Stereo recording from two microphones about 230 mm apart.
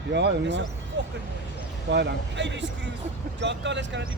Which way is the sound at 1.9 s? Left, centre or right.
Right.